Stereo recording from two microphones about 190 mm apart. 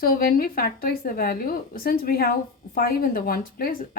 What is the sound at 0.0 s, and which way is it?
A woman's voice, 50° left (ahead or behind).